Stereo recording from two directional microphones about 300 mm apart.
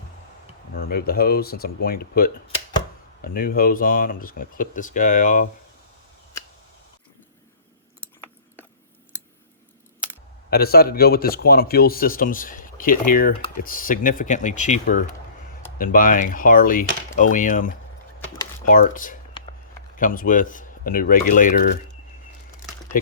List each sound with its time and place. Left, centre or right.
0.7 s speech: left
10.5 s speech: left